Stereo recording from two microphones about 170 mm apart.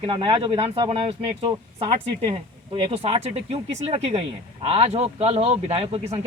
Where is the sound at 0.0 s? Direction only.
30° right (ahead or behind).